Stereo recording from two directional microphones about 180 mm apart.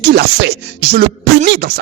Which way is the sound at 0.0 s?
60° right (ahead or behind).